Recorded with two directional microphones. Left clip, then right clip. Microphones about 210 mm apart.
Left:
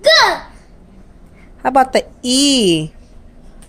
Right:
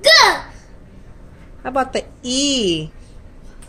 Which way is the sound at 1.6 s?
40° left (ahead or behind).